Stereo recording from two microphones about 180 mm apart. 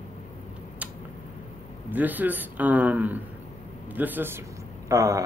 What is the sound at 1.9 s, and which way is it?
Speech, 10° right (ahead or behind).